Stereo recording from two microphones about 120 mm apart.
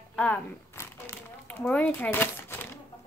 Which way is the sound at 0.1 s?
10° left (ahead or behind).